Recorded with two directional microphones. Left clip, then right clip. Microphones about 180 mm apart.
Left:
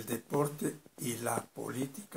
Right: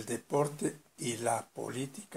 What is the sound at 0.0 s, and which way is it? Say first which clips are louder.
Speech: right 2 dB; 25° right (ahead or behind).